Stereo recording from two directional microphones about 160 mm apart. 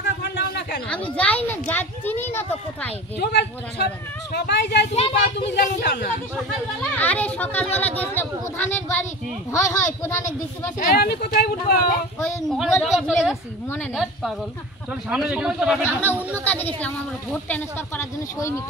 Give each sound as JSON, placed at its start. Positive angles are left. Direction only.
{"t": 0.2, "sound": "a sound", "side_deg": 90}
{"t": 1.1, "sound": "a woman's voice", "side_deg": 10}
{"t": 3.2, "sound": "speech", "side_deg": 90}
{"t": 4.9, "sound": "speech", "side_deg": 35}
{"t": 5.5, "sound": "speech", "side_deg": 90}
{"t": 6.8, "sound": "a woman's voice", "side_deg": 10}
{"t": 10.8, "sound": "speech", "side_deg": 70}
{"t": 12.4, "sound": "speech", "side_deg": 0}
{"t": 15.0, "sound": "speech", "side_deg": -5}
{"t": 15.8, "sound": "a woman's voice", "side_deg": 10}